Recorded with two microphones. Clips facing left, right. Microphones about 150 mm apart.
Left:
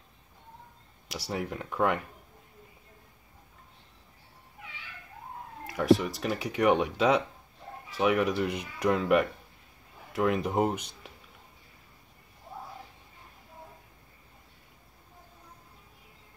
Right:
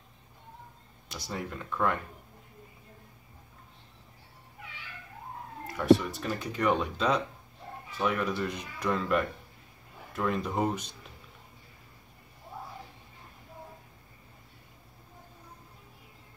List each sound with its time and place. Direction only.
1.1 s speech: 70° left (ahead or behind)
5.8 s speech: 75° left (ahead or behind); by 10.8 s 55° left (ahead or behind)